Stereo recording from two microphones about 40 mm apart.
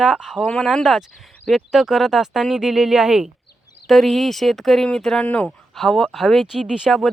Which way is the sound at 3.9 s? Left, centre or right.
Centre.